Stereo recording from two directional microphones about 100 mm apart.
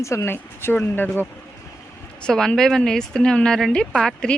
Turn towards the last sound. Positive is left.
turn(degrees=5)  # may be behind; listen again after turning